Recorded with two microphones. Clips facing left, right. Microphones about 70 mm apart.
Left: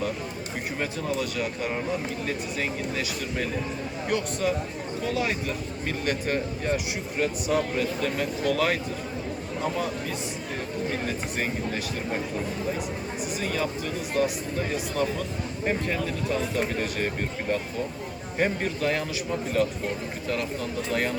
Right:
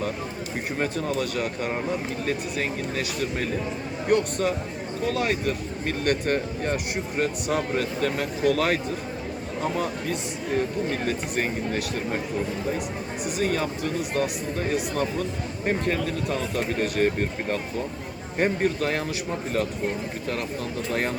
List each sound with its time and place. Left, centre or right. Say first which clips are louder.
0.8 s speech: right 3 dB; right
11.0 s speech: right 3 dB; right
13.4 s speech: right 4 dB; right
16.8 s speech: right 5 dB; right